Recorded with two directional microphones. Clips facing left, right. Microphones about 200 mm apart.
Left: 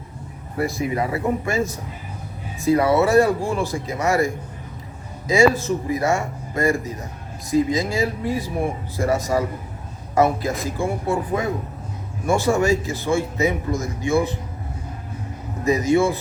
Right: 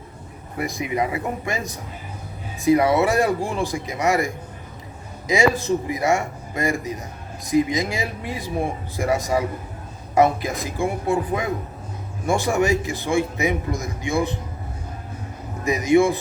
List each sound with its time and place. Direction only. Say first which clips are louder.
0.6 s a man's voice: left 1 dB; 15° right (ahead or behind)
5.3 s a man's voice: left 2 dB; 15° right (ahead or behind)
15.6 s a man's voice: right 1 dB; 15° right (ahead or behind)